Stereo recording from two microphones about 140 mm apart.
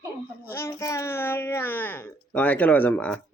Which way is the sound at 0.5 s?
20° left (ahead or behind).